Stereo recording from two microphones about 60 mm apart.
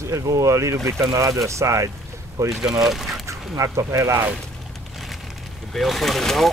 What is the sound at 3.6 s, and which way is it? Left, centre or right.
Speech, right.